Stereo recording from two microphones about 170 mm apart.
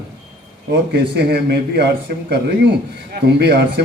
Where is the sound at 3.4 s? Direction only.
75° right (ahead or behind).